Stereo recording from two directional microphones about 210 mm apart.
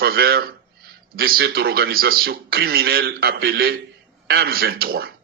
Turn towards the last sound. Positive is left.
turn(degrees=-45)  # may be behind; listen again after turning